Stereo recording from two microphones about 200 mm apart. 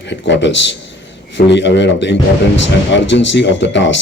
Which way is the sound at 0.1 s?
65° left (ahead or behind).